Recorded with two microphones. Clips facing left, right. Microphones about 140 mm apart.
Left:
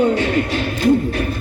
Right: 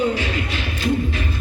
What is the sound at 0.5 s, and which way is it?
Music, 45° left (ahead or behind).